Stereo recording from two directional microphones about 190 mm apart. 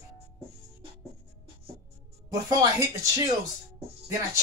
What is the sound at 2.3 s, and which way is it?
Speech, 20° right (ahead or behind).